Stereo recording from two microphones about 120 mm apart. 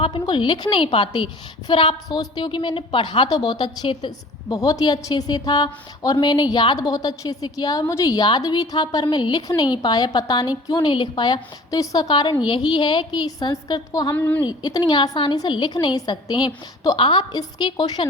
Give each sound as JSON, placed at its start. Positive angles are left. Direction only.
{"t": 0.0, "sound": "a woman's voice", "side_deg": 40}
{"t": 14.2, "sound": "a woman's voice", "side_deg": 15}
{"t": 14.4, "sound": "a woman's voice", "side_deg": 35}